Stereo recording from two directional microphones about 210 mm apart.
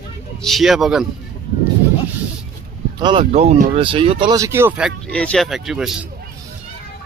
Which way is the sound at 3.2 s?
30° right (ahead or behind).